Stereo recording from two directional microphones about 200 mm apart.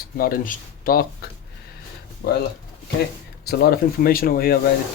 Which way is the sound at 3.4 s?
50° left (ahead or behind).